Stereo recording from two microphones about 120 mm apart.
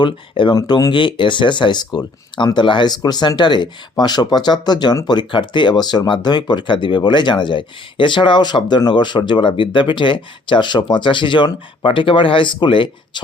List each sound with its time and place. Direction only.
0.0 s speech: 40° left (ahead or behind)